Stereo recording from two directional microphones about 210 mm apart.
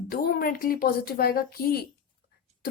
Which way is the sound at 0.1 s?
45° left (ahead or behind).